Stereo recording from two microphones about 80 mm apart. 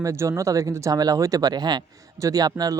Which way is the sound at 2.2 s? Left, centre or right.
Right.